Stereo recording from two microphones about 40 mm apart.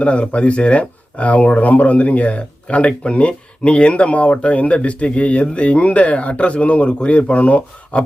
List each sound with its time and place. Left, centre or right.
0.0 s speech: left